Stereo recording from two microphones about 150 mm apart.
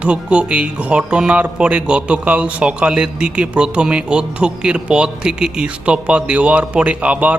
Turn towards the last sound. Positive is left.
turn(degrees=-10)  # may be behind; listen again after turning